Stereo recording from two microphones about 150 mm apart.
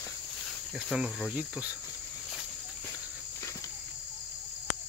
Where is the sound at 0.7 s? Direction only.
Centre (ahead or behind).